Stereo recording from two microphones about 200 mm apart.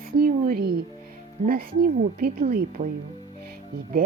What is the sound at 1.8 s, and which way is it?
A woman's voice, 50° right (ahead or behind).